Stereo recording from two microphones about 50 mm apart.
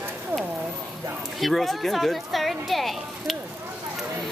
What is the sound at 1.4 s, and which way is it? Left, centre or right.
Speech, centre.